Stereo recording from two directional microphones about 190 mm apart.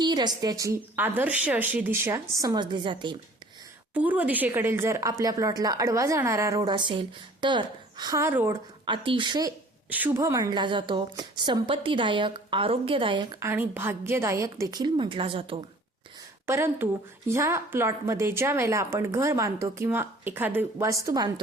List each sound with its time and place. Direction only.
0.0 s a sound: 20° right (ahead or behind)
0.4 s a woman's voice: 15° right (ahead or behind)
3.9 s a woman's voice: 10° right (ahead or behind)
8.8 s a woman's voice: 25° right (ahead or behind)
9.9 s a woman's voice: 10° right (ahead or behind)
13.4 s a woman's voice: 10° right (ahead or behind); by 15.5 s 30° right (ahead or behind)
16.5 s a woman's voice: 10° right (ahead or behind)